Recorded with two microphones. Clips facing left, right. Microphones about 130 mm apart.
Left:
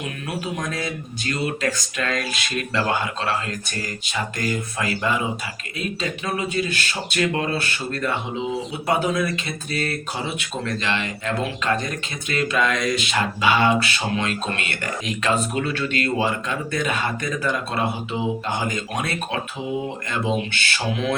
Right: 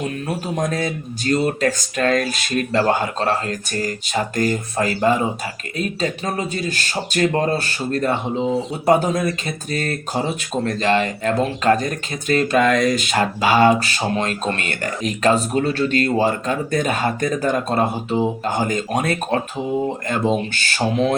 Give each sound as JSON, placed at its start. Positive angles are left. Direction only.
{"t": 0.0, "sound": "speech", "side_deg": -40}